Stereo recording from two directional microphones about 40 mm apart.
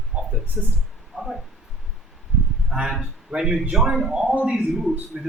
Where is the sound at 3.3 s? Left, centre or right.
Right.